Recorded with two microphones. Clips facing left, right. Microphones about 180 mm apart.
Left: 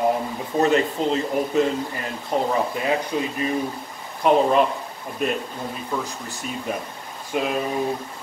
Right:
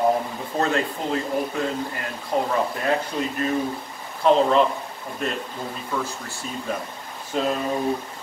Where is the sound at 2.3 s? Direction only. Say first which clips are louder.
Left 1 dB; 20° left (ahead or behind).